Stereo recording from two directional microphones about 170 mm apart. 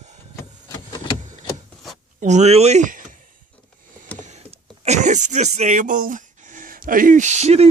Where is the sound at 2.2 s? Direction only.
40° right (ahead or behind).